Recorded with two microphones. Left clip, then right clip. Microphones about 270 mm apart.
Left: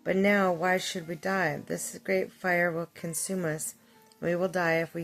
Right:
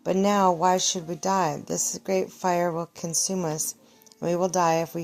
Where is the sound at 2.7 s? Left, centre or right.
Right.